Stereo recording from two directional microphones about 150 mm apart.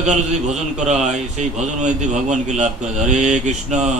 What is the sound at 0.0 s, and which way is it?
A man's voice, 50° right (ahead or behind).